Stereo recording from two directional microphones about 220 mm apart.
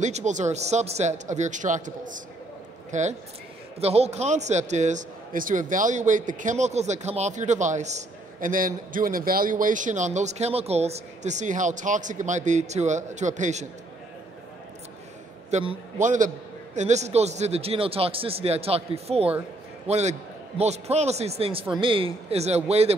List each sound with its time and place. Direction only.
0.0 s a man's voice: 35° right (ahead or behind)
15.5 s a man's voice: 30° right (ahead or behind)